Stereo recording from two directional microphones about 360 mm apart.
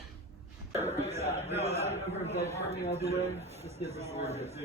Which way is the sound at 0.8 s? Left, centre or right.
Centre.